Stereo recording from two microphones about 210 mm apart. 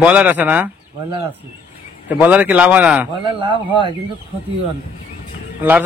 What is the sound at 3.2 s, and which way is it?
Speech, 25° right (ahead or behind).